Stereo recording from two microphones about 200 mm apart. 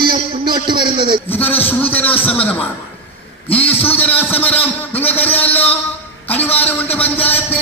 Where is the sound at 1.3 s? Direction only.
10° left (ahead or behind).